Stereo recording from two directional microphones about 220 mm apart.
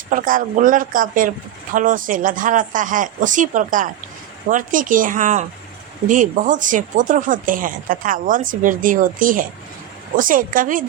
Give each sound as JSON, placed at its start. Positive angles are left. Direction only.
{"t": 0.1, "sound": "speech", "side_deg": -40}